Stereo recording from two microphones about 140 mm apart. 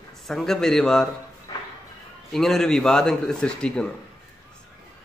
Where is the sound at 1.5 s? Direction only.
30° left (ahead or behind).